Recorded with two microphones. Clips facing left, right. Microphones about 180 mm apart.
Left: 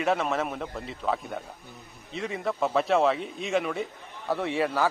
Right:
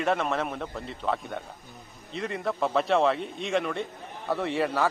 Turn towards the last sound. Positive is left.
turn(degrees=0)  # may be behind; listen again after turning